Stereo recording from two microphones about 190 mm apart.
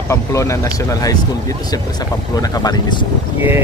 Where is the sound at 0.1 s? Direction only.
15° left (ahead or behind).